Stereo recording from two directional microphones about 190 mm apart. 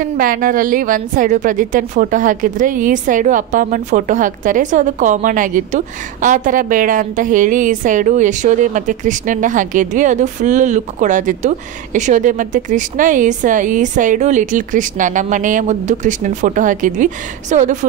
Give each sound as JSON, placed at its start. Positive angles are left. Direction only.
{"t": 0.0, "sound": "a woman's voice", "side_deg": -50}